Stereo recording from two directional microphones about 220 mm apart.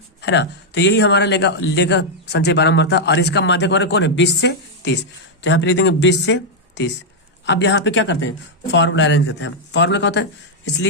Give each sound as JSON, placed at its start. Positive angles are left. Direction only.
{"t": 0.2, "sound": "a man's voice", "side_deg": 50}